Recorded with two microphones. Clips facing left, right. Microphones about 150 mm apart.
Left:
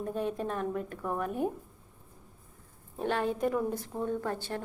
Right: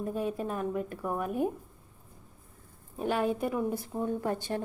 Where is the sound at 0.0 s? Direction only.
5° right (ahead or behind).